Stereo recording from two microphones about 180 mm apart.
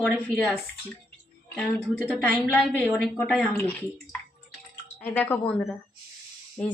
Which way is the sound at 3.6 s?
10° left (ahead or behind).